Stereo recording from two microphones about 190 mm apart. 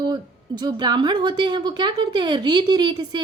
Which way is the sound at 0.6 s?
20° right (ahead or behind).